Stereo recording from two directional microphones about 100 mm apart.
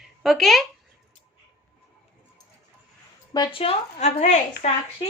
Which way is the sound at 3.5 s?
80° left.